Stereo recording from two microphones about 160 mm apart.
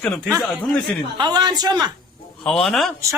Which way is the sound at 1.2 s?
25° right (ahead or behind).